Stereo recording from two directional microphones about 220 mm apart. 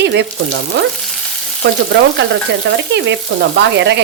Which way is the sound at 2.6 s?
55° right (ahead or behind).